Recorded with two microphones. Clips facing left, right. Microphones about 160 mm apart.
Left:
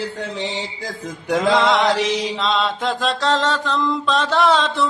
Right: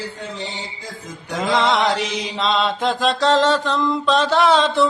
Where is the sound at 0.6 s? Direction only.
90° left.